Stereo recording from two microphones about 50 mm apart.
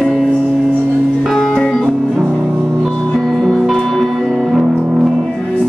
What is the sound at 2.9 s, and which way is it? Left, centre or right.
Music, centre.